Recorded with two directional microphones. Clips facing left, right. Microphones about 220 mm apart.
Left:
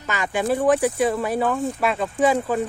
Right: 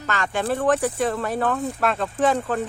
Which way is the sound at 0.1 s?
10° left (ahead or behind).